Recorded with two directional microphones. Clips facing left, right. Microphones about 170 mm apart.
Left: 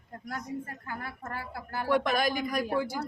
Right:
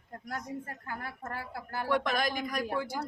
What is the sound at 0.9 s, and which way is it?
Speech, 40° right (ahead or behind).